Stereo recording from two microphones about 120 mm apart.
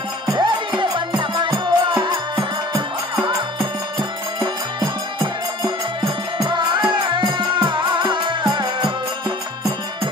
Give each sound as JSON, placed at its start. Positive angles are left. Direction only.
{"t": 0.3, "sound": "music", "side_deg": -40}
{"t": 4.4, "sound": "music", "side_deg": -35}